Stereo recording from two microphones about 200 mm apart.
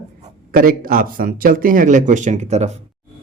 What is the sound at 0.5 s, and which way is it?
Speech, 45° right (ahead or behind).